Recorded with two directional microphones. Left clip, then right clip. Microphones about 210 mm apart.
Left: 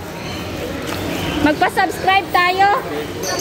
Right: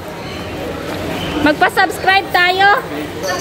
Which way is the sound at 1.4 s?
Centre (ahead or behind).